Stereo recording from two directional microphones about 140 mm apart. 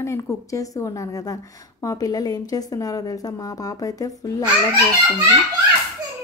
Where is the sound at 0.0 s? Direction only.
20° left (ahead or behind).